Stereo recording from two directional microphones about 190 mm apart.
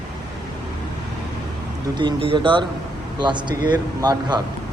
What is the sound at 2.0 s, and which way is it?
Speech, 25° right (ahead or behind).